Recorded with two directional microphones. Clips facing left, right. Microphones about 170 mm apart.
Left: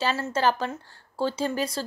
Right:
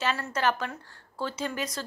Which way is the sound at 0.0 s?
30° left (ahead or behind).